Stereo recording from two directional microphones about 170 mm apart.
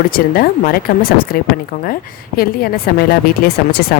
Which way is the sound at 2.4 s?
60° left (ahead or behind).